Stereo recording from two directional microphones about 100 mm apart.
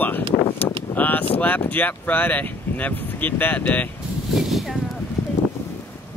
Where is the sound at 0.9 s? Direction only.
15° left (ahead or behind).